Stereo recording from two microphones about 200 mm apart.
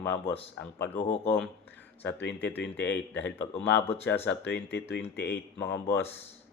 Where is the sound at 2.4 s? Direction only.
10° left (ahead or behind).